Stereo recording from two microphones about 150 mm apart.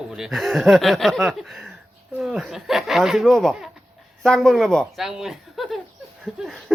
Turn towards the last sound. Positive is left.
turn(degrees=0)  # may be behind; listen again after turning